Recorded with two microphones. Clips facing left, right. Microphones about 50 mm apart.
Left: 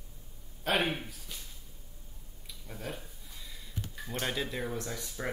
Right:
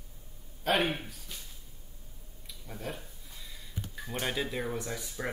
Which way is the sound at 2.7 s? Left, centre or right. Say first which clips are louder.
Right 1 dB; centre.